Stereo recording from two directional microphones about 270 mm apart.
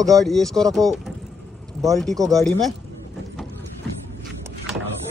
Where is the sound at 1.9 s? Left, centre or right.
Centre.